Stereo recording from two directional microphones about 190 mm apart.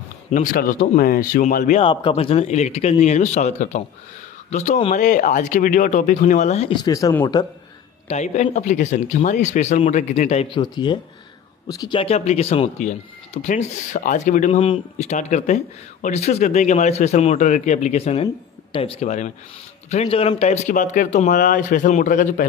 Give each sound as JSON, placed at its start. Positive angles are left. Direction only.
{"t": 0.3, "sound": "speech", "side_deg": 45}
{"t": 1.8, "sound": "speech", "side_deg": 30}
{"t": 8.1, "sound": "speech", "side_deg": 35}